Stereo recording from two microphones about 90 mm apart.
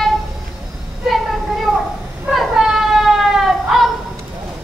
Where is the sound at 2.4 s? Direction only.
5° right (ahead or behind).